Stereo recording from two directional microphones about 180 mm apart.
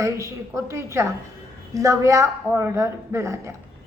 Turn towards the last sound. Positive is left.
turn(degrees=-15)  # may be behind; listen again after turning